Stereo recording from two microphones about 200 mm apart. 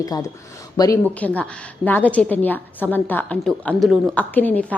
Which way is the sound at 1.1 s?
5° left (ahead or behind).